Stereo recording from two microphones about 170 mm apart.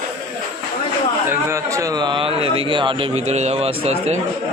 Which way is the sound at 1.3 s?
15° right (ahead or behind).